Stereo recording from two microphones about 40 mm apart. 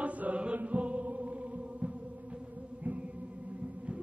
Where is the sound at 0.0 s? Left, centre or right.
Right.